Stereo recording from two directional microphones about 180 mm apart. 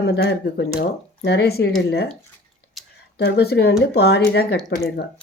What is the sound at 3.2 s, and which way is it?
Speech, 65° left (ahead or behind).